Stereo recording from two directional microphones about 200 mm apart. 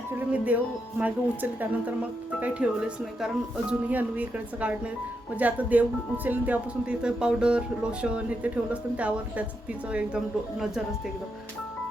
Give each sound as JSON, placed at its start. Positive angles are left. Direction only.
{"t": 0.2, "sound": "speech", "side_deg": -10}